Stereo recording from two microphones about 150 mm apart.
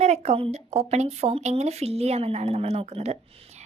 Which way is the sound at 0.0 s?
45° right (ahead or behind).